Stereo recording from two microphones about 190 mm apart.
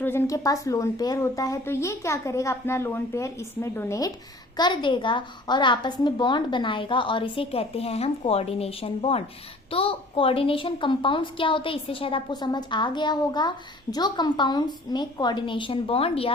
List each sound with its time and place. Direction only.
0.0 s a woman's voice: 10° left (ahead or behind); by 16.3 s 30° left (ahead or behind)